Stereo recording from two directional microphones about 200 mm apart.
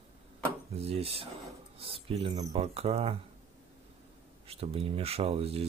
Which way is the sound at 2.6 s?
30° right (ahead or behind).